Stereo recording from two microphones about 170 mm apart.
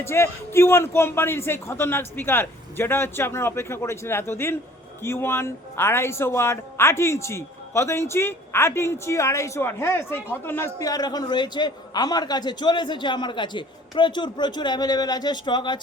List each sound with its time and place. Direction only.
0.0 s a man's voice: 15° left (ahead or behind)